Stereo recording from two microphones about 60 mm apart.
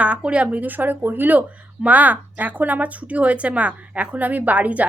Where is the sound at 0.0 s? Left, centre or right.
Centre.